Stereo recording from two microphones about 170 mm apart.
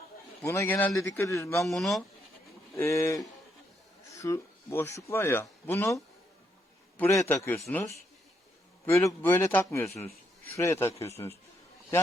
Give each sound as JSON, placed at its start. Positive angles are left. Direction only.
{"t": 0.4, "sound": "a man's voice", "side_deg": 15}
{"t": 1.6, "sound": "speech", "side_deg": 0}
{"t": 2.7, "sound": "a man's voice", "side_deg": 15}